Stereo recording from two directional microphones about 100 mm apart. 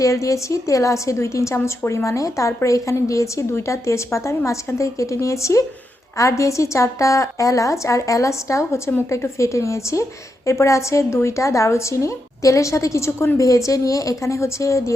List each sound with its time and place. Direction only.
0.0 s a woman's voice: 30° left (ahead or behind)